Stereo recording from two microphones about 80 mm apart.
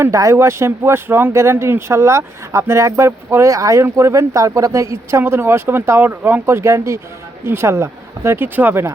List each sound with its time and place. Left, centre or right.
0.0 s speech: right